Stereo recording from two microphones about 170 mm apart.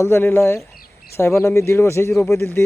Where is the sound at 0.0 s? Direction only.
15° left (ahead or behind).